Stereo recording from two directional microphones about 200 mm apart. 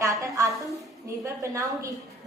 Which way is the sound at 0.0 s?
15° right (ahead or behind).